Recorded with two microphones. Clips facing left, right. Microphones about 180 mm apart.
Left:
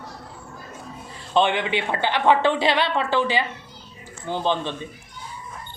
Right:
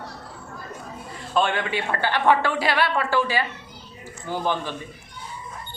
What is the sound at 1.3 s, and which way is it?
A man's voice, 15° left (ahead or behind).